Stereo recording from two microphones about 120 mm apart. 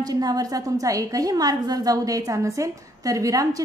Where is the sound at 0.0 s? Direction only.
30° right (ahead or behind).